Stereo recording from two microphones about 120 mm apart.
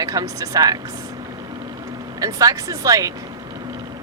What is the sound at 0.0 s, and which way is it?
Speech, 30° right (ahead or behind).